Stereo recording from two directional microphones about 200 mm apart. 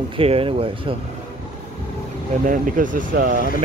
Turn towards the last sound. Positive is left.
turn(degrees=-45)  # may be behind; listen again after turning